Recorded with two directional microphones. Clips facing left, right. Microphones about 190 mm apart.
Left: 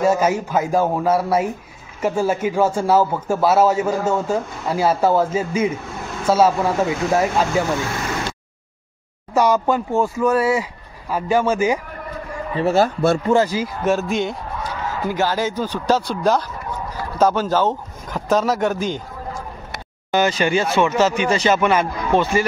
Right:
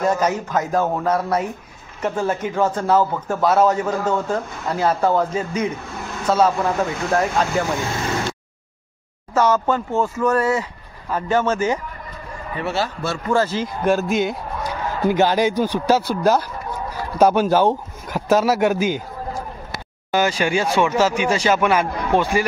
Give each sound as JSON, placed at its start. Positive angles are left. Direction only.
{"t": 0.0, "sound": "a man's voice", "side_deg": 5}
{"t": 9.3, "sound": "a man's voice", "side_deg": 15}
{"t": 12.5, "sound": "speech", "side_deg": 40}
{"t": 13.3, "sound": "a man's voice", "side_deg": 15}
{"t": 13.8, "sound": "speech", "side_deg": 0}
{"t": 14.6, "sound": "a man's voice", "side_deg": -20}
{"t": 20.1, "sound": "speech", "side_deg": -10}